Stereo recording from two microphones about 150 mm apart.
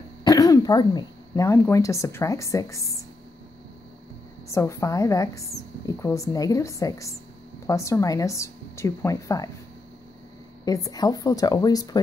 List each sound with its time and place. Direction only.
0.2 s speech: 25° left (ahead or behind)
4.5 s a woman's voice: 20° left (ahead or behind)
10.6 s a woman's voice: 25° left (ahead or behind)